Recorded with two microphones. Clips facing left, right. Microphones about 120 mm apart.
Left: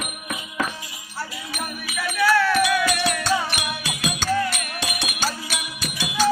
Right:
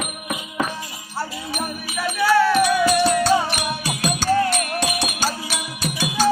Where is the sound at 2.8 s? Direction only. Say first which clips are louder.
Right 6 dB; 35° right (ahead or behind).